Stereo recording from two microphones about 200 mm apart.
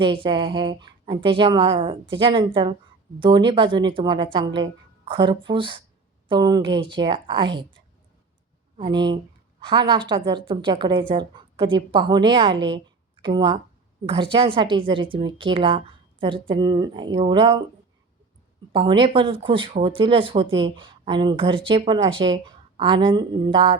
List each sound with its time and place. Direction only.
0.0 s a woman's voice: 25° right (ahead or behind)
8.8 s a woman's voice: 20° right (ahead or behind)
18.7 s a woman's voice: 25° right (ahead or behind)